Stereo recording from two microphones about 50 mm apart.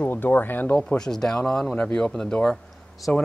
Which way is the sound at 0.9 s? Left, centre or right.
Centre.